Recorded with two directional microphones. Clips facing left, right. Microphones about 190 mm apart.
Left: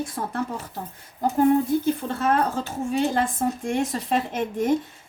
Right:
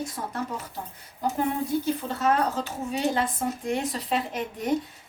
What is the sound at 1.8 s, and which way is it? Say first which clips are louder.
A woman's voice: left 2 dB; 50° left (ahead or behind).